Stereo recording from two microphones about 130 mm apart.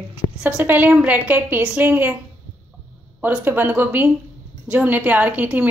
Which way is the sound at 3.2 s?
15° right (ahead or behind).